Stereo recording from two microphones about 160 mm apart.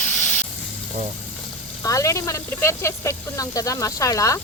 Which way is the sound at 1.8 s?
20° left (ahead or behind).